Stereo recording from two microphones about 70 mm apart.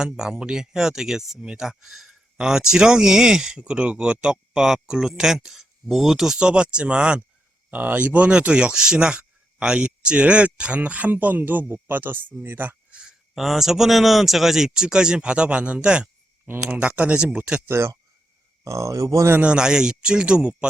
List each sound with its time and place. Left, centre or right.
0.0 s speech: centre; by 12.7 s right
12.9 s speech: centre
17.7 s speech: right
19.4 s speech: centre